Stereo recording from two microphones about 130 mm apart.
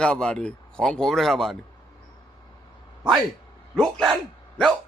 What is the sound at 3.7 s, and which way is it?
Speech, centre (ahead or behind).